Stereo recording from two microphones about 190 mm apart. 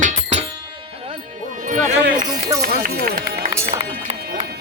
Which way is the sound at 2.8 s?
55° right (ahead or behind).